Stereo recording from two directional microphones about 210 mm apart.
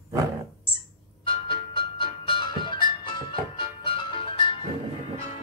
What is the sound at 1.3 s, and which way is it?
Music, 25° left (ahead or behind).